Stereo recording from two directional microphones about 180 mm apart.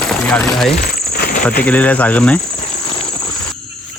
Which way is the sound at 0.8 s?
55° left (ahead or behind).